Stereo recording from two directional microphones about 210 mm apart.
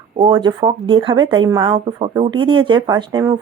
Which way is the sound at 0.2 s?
20° right (ahead or behind).